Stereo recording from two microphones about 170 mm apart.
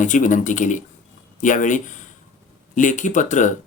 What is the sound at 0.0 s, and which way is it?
Speech, 50° left (ahead or behind).